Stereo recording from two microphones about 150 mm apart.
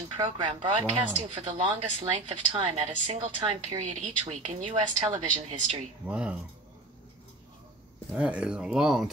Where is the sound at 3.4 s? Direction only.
40° right (ahead or behind).